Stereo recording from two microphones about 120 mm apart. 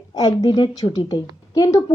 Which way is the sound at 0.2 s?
35° left (ahead or behind).